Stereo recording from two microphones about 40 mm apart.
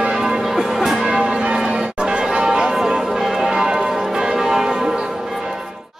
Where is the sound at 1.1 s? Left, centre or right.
Centre.